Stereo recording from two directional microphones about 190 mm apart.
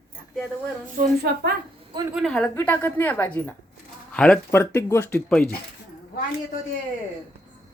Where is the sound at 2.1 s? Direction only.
5° left (ahead or behind).